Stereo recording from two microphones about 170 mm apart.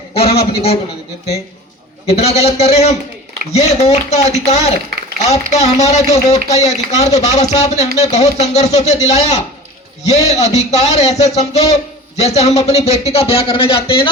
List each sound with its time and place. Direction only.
0.1 s speech: 35° left (ahead or behind)
2.0 s speech: 40° left (ahead or behind)